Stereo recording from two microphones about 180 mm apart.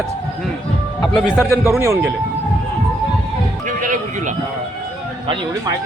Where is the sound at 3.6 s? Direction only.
45° right (ahead or behind).